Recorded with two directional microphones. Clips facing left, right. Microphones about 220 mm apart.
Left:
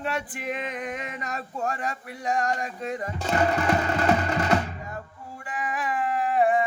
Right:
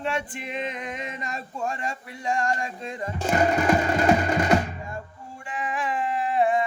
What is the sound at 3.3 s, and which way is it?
Music, 20° right (ahead or behind).